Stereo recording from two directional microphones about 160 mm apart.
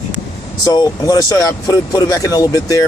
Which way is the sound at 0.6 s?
25° left (ahead or behind).